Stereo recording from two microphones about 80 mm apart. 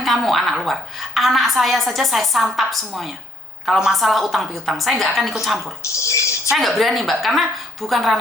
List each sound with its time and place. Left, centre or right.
0.0 s a woman's voice: centre
5.8 s a sound: left
6.5 s a woman's voice: centre